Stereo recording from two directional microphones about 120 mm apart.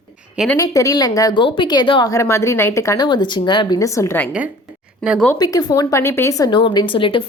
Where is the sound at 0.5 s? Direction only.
25° left (ahead or behind).